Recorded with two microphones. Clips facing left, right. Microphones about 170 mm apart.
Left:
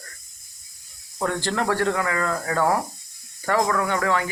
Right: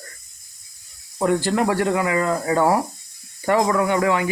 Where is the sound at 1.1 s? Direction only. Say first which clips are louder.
Right 5 dB; 15° right (ahead or behind).